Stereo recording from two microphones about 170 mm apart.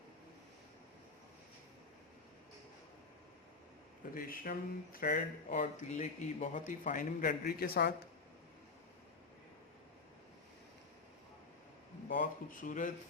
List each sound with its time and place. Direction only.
4.1 s speech: 55° left (ahead or behind)
12.0 s speech: 50° left (ahead or behind)